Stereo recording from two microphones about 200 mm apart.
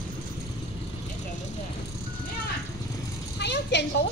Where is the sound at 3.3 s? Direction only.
60° left (ahead or behind).